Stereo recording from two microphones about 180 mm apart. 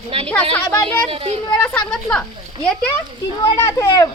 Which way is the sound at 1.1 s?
30° right (ahead or behind).